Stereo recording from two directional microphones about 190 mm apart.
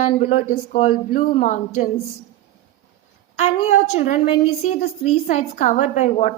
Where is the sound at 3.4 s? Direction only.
35° left (ahead or behind).